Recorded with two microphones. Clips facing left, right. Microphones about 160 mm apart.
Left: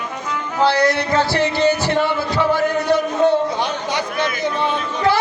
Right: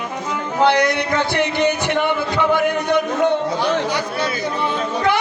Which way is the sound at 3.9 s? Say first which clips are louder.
Even; 20° left (ahead or behind).